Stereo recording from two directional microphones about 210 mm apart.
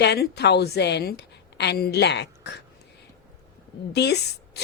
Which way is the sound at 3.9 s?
50° left (ahead or behind).